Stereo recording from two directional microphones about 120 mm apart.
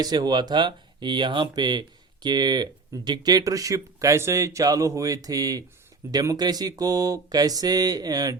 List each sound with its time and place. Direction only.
0.0 s speech: 35° right (ahead or behind)